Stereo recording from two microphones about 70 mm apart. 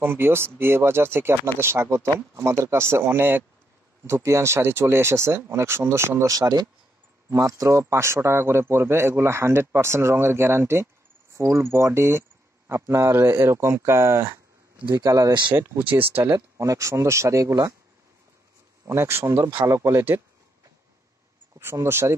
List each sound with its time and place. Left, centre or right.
0.0 s a man's voice: right
4.1 s a man's voice: right
6.3 s speech: right
7.2 s a man's voice: right
13.1 s a man's voice: right
15.0 s speech: right
16.0 s speech: right
16.5 s speech: right
18.9 s a man's voice: right
21.5 s a man's voice: right